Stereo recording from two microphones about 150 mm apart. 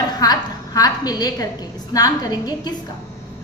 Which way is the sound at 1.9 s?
25° left (ahead or behind).